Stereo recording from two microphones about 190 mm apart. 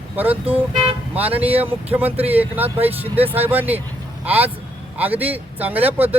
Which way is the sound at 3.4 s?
10° right (ahead or behind).